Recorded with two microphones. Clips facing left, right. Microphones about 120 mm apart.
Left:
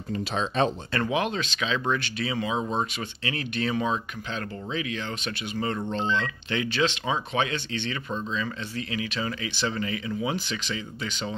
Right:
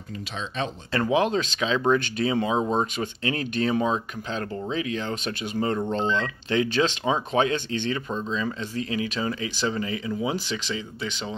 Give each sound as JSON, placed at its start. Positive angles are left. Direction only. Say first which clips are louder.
{"t": 0.1, "sound": "speech", "louder": "left 6 dB", "side_deg": 40}
{"t": 0.9, "sound": "speech", "louder": "right 7 dB", "side_deg": -30}
{"t": 8.3, "sound": "speech", "louder": "right 3 dB", "side_deg": -30}